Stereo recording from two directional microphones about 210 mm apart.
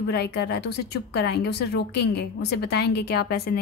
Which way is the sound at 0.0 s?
50° left (ahead or behind).